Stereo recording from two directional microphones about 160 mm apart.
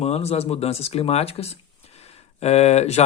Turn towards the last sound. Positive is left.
turn(degrees=45)  # may be behind; listen again after turning